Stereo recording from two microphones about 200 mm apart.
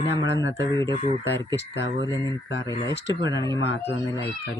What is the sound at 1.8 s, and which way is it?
Speech, 20° right (ahead or behind).